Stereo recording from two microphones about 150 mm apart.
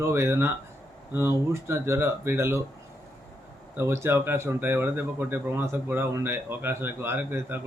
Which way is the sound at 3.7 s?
15° right (ahead or behind).